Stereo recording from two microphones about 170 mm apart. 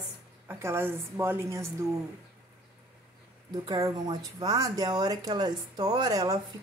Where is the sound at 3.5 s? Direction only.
20° right (ahead or behind).